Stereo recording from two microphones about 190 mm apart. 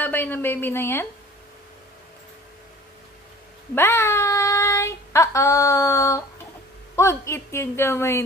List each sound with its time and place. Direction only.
0.0 s a woman's voice: 10° left (ahead or behind)
3.7 s child singing: 15° left (ahead or behind)
7.0 s a woman's voice: 15° left (ahead or behind)